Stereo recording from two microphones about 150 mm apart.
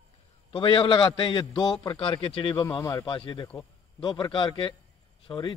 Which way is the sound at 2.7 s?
20° left (ahead or behind).